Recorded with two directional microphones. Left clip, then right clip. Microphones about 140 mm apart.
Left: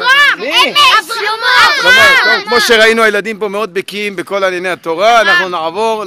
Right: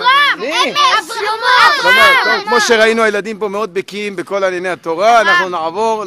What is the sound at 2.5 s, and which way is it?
A man's voice, 15° left (ahead or behind).